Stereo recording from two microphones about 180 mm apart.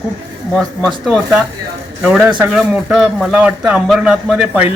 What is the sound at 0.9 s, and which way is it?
A man's voice, centre (ahead or behind).